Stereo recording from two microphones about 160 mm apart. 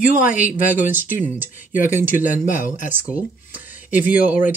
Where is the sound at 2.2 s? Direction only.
55° left (ahead or behind).